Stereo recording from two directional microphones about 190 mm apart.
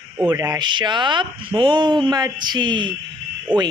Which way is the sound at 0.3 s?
20° right (ahead or behind).